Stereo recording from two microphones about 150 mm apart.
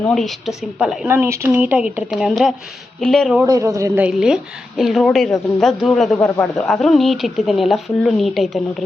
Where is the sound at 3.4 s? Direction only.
20° right (ahead or behind).